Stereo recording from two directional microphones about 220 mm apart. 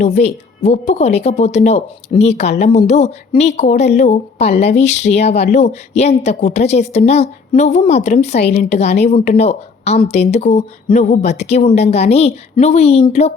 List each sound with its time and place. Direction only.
0.0 s speech: 30° left (ahead or behind)